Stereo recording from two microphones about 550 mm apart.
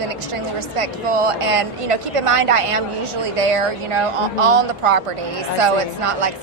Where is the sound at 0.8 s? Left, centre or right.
Right.